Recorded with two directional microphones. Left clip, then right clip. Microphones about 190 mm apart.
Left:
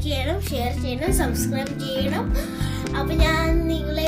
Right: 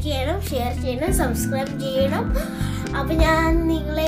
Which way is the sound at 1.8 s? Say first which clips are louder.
Right 6 dB; 15° right (ahead or behind).